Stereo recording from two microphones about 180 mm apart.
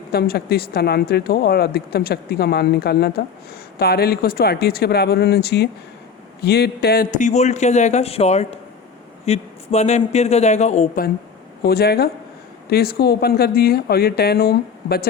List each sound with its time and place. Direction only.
0.1 s a man's voice: 60° left (ahead or behind); by 11.0 s 40° left (ahead or behind)
11.6 s speech: 60° left (ahead or behind)